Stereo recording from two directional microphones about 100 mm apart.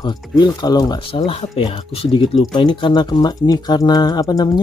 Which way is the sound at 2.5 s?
50° left (ahead or behind).